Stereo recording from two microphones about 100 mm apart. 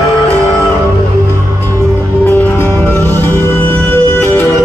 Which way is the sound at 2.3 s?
25° left (ahead or behind).